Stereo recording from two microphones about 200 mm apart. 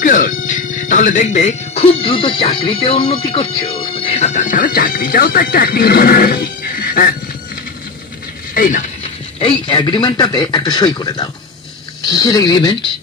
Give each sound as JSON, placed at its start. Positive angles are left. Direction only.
{"t": 0.0, "sound": "speech", "side_deg": 40}
{"t": 8.5, "sound": "speech", "side_deg": 40}
{"t": 9.4, "sound": "a man's voice", "side_deg": 25}